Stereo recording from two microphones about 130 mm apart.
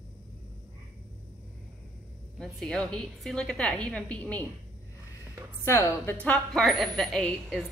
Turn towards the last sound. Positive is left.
turn(degrees=5)  # may be behind; listen again after turning